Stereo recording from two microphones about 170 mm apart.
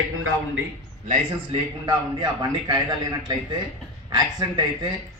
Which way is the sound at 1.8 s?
25° right (ahead or behind).